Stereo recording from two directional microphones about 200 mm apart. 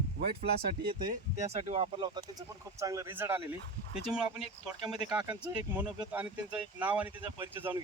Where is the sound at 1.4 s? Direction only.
35° right (ahead or behind).